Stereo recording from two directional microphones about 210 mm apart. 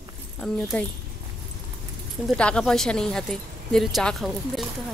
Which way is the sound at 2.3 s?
5° left (ahead or behind).